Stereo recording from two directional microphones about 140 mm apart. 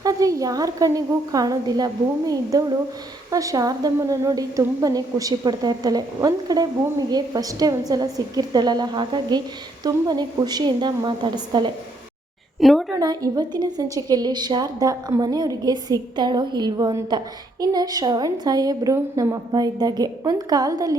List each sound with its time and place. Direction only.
0.0 s a woman's voice: 25° right (ahead or behind)
12.5 s a woman's voice: centre (ahead or behind)
13.0 s a woman's voice: 30° right (ahead or behind)